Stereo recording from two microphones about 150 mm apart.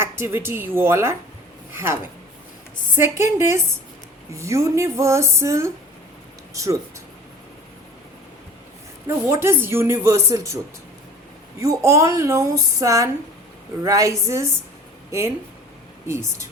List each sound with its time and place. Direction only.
0.0 s a woman's voice: 15° right (ahead or behind)
9.0 s a woman's voice: 15° right (ahead or behind)
11.6 s speech: 20° right (ahead or behind)
16.0 s a woman's voice: 20° right (ahead or behind)